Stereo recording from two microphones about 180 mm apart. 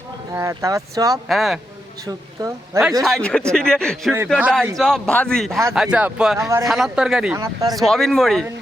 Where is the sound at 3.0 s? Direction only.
5° left (ahead or behind).